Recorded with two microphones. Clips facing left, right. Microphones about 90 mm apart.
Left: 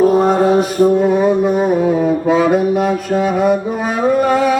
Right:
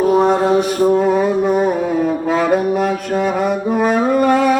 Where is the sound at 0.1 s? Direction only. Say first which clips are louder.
Left 1 dB; centre (ahead or behind).